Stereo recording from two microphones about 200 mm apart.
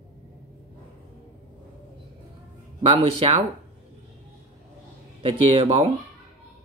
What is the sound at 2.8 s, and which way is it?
Speech, 30° right (ahead or behind).